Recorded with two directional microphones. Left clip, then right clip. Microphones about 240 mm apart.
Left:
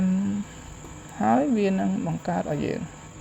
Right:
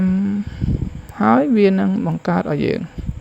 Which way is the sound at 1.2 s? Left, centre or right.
Right.